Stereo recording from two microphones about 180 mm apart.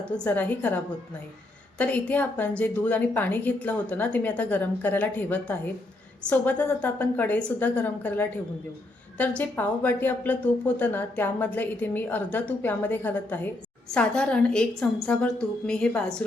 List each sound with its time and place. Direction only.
0.0 s speech: 10° left (ahead or behind)
1.8 s a woman's voice: 10° left (ahead or behind)